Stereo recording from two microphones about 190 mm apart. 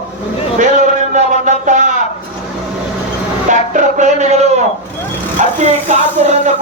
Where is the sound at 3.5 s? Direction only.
40° right (ahead or behind).